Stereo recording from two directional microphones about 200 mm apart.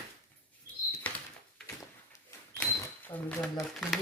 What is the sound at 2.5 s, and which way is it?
Cash register, 10° left (ahead or behind).